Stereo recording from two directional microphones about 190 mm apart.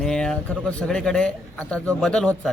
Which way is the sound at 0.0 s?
5° left (ahead or behind).